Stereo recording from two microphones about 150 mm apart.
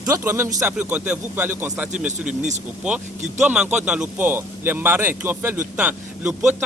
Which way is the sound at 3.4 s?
5° right (ahead or behind).